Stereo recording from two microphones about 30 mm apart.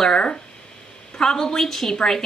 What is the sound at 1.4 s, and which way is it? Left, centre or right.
Speech, centre.